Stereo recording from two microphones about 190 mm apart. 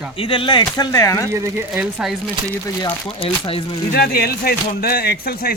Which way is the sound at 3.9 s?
55° left (ahead or behind).